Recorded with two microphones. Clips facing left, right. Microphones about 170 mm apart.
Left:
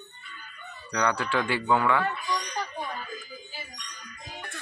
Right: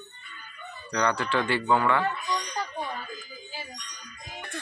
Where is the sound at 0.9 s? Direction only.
10° left (ahead or behind).